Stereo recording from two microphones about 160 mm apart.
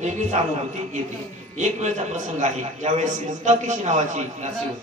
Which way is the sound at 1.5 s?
50° right (ahead or behind).